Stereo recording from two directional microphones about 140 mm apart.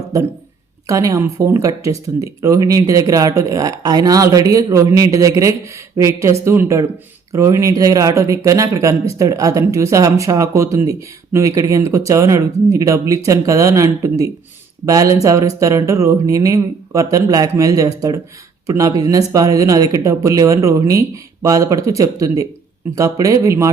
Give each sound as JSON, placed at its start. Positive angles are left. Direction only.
{"t": 0.9, "sound": "speech", "side_deg": -25}